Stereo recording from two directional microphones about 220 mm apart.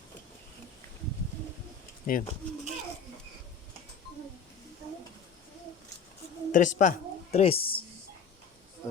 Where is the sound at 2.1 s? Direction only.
40° left (ahead or behind).